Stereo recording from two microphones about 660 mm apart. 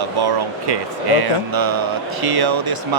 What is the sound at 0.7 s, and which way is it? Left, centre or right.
Speech, right.